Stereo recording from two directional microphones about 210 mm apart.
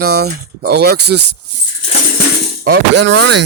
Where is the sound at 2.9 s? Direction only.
60° right (ahead or behind).